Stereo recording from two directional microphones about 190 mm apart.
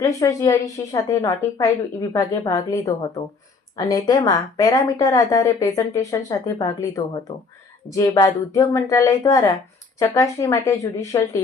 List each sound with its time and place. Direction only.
0.0 s a woman's voice: 15° left (ahead or behind)